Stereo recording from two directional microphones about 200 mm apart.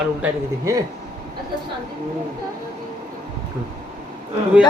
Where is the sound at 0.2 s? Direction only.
15° right (ahead or behind).